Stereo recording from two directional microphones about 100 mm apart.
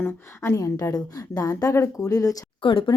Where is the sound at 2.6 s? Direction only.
60° left (ahead or behind).